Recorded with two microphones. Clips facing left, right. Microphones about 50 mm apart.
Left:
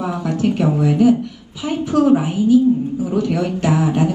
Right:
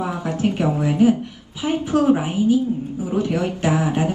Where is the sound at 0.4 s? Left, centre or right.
Right.